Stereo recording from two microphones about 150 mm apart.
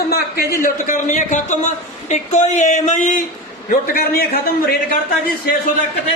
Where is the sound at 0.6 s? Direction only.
60° left (ahead or behind).